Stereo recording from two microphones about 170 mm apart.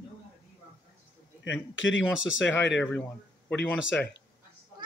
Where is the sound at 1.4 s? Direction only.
90° left.